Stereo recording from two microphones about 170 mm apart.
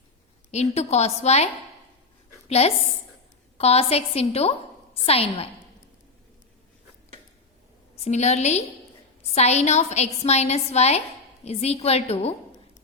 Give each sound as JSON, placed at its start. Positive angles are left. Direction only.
{"t": 0.5, "sound": "a woman's voice", "side_deg": 40}
{"t": 2.5, "sound": "a woman's voice", "side_deg": 40}
{"t": 8.0, "sound": "a woman's voice", "side_deg": 40}